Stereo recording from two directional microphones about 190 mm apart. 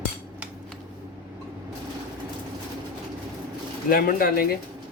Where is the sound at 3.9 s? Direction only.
50° left (ahead or behind).